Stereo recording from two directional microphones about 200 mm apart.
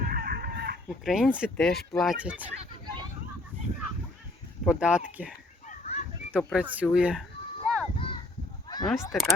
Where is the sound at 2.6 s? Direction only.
20° right (ahead or behind).